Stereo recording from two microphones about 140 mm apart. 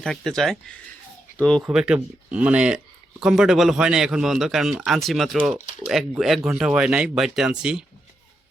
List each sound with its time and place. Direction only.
0.0 s speech: 5° left (ahead or behind)
1.6 s speech: 5° right (ahead or behind)